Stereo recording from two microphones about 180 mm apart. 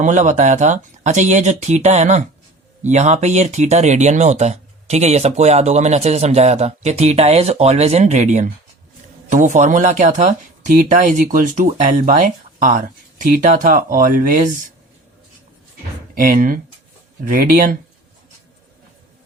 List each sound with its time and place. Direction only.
0.0 s speech: 40° right (ahead or behind)
16.1 s speech: 50° right (ahead or behind)